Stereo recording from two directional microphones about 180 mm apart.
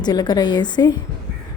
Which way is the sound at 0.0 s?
25° left (ahead or behind).